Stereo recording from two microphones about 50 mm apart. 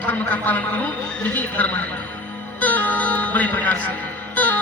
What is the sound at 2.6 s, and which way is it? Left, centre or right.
Music, left.